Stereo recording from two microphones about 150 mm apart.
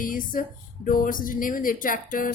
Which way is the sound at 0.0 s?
65° left (ahead or behind).